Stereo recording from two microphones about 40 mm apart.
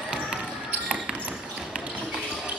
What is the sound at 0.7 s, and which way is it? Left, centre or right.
Basketball bounce, right.